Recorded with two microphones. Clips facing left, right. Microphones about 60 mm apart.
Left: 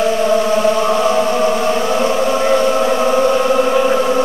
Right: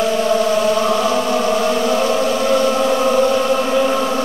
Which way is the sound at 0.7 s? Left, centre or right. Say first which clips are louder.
Left 2 dB; centre.